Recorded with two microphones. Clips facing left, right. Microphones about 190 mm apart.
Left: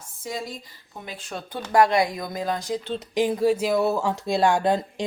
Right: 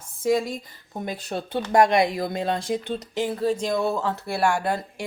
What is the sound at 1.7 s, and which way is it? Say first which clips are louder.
Speech: right 1 dB; 20° right (ahead or behind).